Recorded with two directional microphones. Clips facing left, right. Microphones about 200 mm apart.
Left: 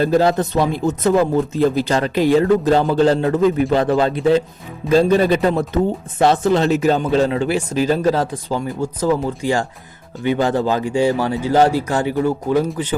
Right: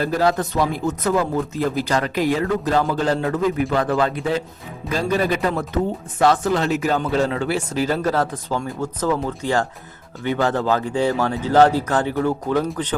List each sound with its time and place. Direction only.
0.0 s speech: 25° left (ahead or behind); by 13.0 s 10° left (ahead or behind)